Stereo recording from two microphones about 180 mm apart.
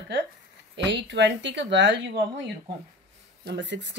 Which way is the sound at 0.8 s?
80° right.